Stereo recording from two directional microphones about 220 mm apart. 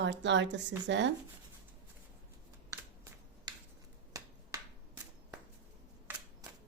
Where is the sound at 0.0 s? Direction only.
55° right (ahead or behind).